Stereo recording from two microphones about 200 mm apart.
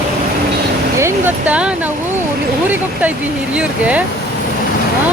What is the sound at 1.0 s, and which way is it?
Speech, 5° right (ahead or behind).